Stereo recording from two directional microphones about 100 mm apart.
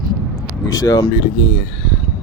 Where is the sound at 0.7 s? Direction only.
40° left (ahead or behind).